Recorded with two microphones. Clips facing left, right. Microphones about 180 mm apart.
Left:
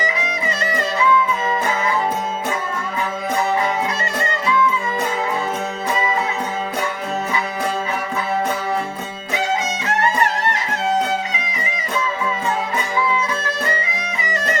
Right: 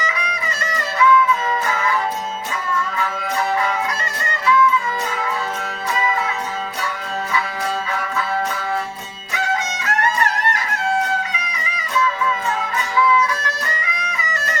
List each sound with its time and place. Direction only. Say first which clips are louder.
0.0 s music: left 3 dB; 25° left (ahead or behind)
3.6 s music: left 1 dB; 20° left (ahead or behind)
9.8 s music: left 2 dB; 25° left (ahead or behind)